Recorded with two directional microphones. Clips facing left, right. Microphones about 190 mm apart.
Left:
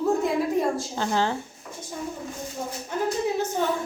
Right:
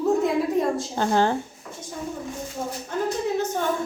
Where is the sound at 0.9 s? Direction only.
50° right (ahead or behind).